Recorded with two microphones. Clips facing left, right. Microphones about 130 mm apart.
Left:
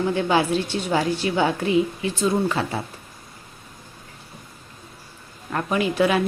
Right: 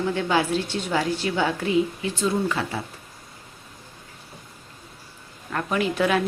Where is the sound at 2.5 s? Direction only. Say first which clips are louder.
Left 2 dB; 30° left (ahead or behind).